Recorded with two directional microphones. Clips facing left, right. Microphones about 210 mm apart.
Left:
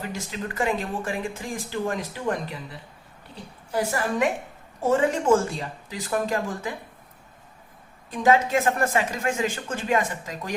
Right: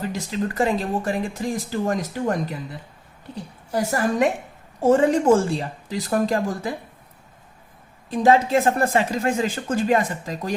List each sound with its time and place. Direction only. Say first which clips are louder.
0.1 s speech: right 6 dB; 35° right (ahead or behind)
3.7 s speech: right 3 dB; 40° right (ahead or behind)
8.1 s speech: right 3 dB; 35° right (ahead or behind)